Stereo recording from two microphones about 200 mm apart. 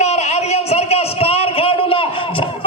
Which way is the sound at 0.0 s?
35° left (ahead or behind).